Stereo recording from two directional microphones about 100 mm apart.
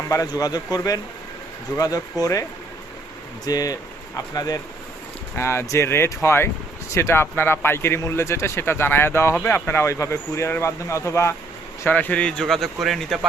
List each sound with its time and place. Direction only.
0.1 s speech: 35° left (ahead or behind)
3.4 s speech: 40° left (ahead or behind)
5.4 s speech: 25° left (ahead or behind)
11.8 s speech: 20° left (ahead or behind); by 13.1 s centre (ahead or behind)